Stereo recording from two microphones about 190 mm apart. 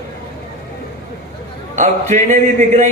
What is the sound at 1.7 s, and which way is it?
Speech, 40° right (ahead or behind).